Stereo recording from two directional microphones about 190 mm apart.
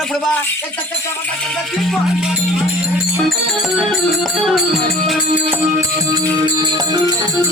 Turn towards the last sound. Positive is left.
turn(degrees=-20)  # may be behind; listen again after turning